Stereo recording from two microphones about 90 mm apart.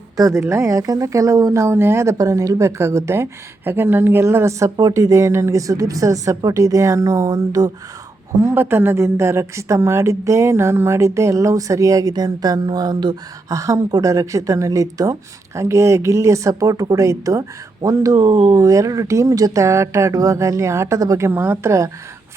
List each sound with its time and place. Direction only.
0.2 s a woman's voice: 35° right (ahead or behind)
4.8 s a woman's voice: 45° right (ahead or behind)
8.4 s a woman's voice: 25° right (ahead or behind); by 13.1 s 55° right (ahead or behind)
13.5 s a woman's voice: 35° right (ahead or behind)